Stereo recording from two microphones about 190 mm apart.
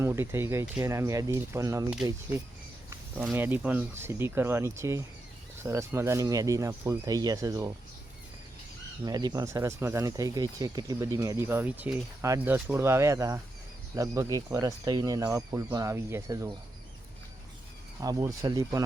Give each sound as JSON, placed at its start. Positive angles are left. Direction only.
{"t": 0.0, "sound": "speech", "side_deg": -15}
{"t": 3.2, "sound": "speech", "side_deg": -10}
{"t": 9.0, "sound": "speech", "side_deg": -20}
{"t": 18.0, "sound": "speech", "side_deg": -20}